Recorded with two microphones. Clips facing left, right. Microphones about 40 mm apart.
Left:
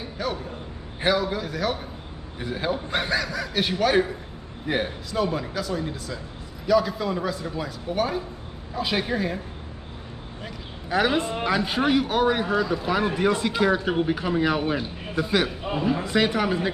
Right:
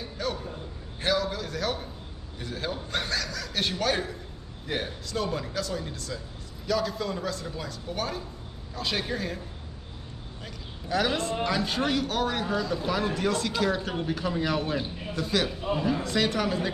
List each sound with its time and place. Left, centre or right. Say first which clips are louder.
0.2 s a man's voice: left 3 dB; centre
10.4 s a man's voice: left 3 dB; centre